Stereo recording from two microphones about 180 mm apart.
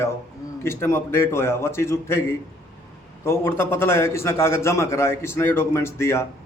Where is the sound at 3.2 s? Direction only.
15° left (ahead or behind).